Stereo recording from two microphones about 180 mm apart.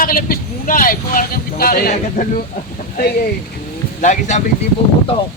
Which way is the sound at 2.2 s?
45° left (ahead or behind).